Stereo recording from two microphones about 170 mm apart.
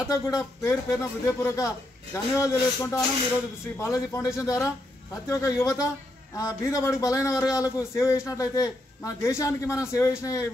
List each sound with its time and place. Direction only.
0.1 s a man's voice: 15° left (ahead or behind)